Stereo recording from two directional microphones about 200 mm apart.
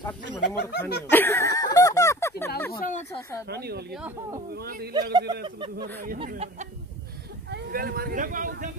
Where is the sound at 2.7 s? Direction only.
40° left (ahead or behind).